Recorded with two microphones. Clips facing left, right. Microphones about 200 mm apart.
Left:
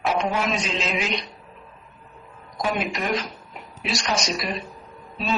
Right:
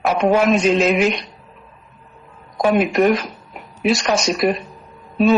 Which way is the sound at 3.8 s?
55° right (ahead or behind).